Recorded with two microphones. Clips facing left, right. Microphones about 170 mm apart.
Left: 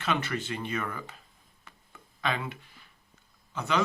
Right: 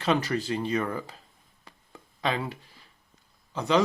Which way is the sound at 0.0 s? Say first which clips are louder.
Right 5 dB; 35° right (ahead or behind).